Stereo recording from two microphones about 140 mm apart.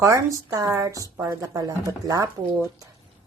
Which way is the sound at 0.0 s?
25° right (ahead or behind).